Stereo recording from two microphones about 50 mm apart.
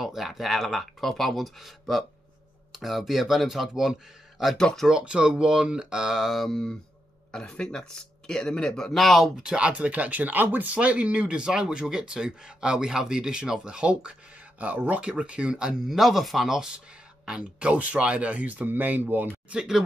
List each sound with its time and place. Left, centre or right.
0.0 s speech: centre
4.6 s speech: centre
5.0 s speech: centre
6.4 s speech: centre
9.4 s speech: centre
9.7 s speech: right
15.9 s speech: centre; by 19.2 s right
19.5 s speech: centre